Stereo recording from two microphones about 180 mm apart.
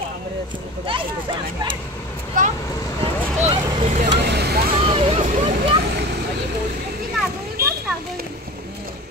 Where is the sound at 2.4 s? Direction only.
45° right (ahead or behind).